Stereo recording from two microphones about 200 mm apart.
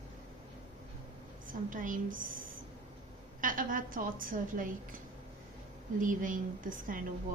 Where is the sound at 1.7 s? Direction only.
40° right (ahead or behind).